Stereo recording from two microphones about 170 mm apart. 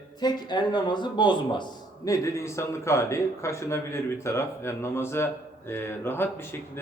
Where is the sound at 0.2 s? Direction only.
25° left (ahead or behind).